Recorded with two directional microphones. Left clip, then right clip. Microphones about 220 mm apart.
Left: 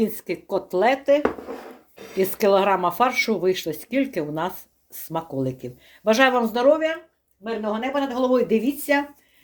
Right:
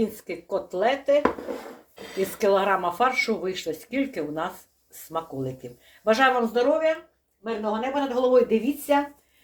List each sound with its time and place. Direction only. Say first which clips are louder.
0.0 s speech: left 3 dB; 45° left (ahead or behind)
2.4 s speech: left 3 dB; 50° left (ahead or behind)